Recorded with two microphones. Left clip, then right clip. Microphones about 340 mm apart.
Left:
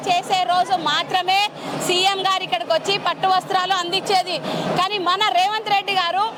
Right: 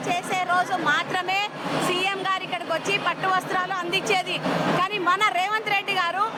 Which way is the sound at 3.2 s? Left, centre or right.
Left.